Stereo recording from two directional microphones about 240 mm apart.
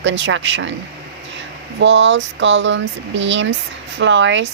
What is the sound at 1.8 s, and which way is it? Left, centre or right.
Speech, right.